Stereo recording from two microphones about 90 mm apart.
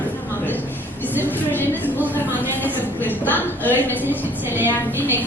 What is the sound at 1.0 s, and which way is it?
A woman's voice, 20° left (ahead or behind).